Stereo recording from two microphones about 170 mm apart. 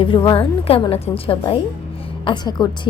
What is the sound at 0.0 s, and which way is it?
A woman's voice, 30° left (ahead or behind).